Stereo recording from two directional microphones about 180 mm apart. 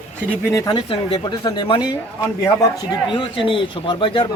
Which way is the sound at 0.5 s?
20° left (ahead or behind).